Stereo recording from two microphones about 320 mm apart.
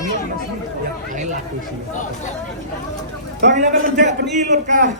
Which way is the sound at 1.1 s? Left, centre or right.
Right.